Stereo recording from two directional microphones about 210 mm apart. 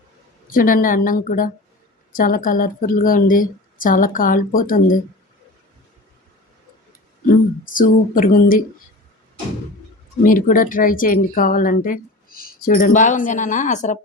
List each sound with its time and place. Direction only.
0.5 s a woman's voice: 40° left (ahead or behind)
7.6 s a woman's voice: 40° left (ahead or behind)
10.2 s a woman's voice: 40° left (ahead or behind)